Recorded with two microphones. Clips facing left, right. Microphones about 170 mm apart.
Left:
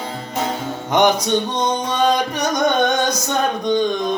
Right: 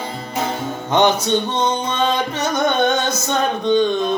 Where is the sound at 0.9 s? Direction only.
15° left (ahead or behind).